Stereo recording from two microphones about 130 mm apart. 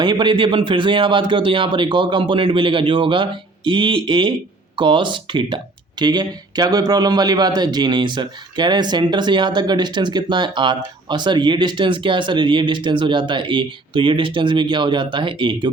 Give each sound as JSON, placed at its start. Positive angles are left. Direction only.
{"t": 0.0, "sound": "a man's voice", "side_deg": -35}